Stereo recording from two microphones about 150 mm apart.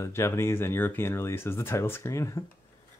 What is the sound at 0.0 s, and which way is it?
Speech, 20° left (ahead or behind).